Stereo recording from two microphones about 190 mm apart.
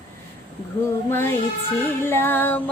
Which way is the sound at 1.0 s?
10° left (ahead or behind).